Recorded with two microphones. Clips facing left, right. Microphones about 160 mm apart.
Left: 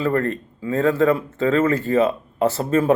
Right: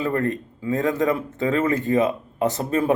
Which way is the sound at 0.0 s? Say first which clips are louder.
Left 2 dB; 15° right (ahead or behind).